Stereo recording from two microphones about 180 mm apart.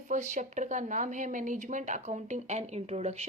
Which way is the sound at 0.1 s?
40° right (ahead or behind).